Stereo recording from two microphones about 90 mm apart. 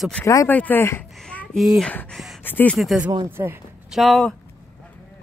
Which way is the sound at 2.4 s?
20° left (ahead or behind).